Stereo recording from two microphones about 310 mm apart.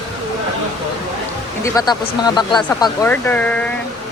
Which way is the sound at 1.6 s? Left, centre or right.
Centre.